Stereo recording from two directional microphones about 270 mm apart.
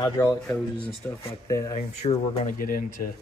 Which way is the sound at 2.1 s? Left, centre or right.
Left.